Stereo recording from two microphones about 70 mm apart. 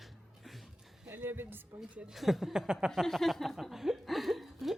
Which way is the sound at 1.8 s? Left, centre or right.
Centre.